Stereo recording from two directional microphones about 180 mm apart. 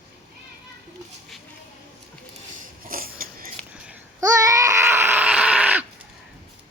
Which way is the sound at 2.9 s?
50° right (ahead or behind).